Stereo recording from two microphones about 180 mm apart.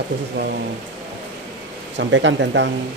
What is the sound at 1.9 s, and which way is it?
Speech, 90° right.